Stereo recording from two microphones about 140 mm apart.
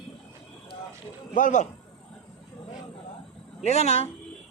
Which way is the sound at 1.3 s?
65° left (ahead or behind).